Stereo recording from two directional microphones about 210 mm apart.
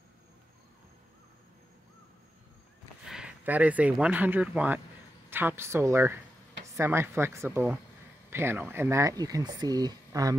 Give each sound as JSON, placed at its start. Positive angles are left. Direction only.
{"t": 3.1, "sound": "speech", "side_deg": -5}